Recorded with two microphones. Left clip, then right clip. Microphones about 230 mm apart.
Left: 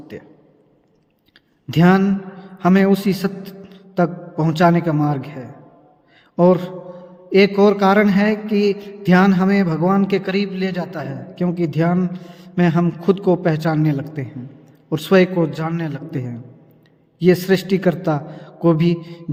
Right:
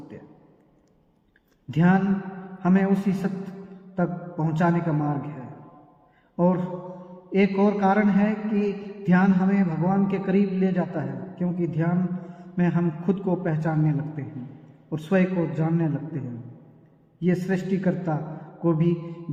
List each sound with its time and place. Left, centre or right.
1.7 s mantra: left
6.3 s mantra: left